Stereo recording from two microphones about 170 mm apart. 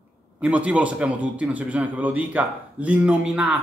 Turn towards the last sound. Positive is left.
turn(degrees=-5)  # may be behind; listen again after turning